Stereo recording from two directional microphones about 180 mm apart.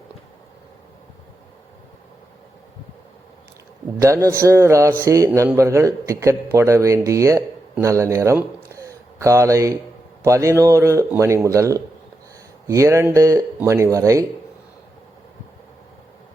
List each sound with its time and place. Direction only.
4.0 s speech: 15° right (ahead or behind)